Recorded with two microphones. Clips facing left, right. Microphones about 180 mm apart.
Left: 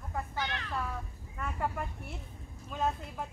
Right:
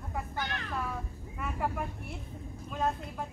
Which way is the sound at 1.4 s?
5° right (ahead or behind).